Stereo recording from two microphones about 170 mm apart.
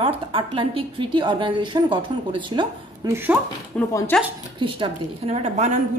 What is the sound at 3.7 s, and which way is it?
Speech, 15° left (ahead or behind).